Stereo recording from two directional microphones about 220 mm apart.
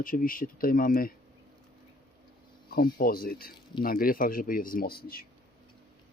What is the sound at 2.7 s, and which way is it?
Speech, 40° left (ahead or behind).